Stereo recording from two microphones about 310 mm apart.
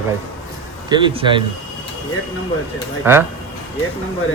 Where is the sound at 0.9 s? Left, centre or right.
Centre.